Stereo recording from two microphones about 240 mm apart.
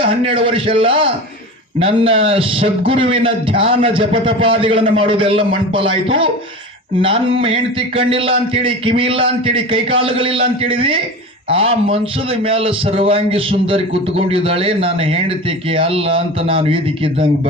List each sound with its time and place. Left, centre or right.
0.0 s speech: right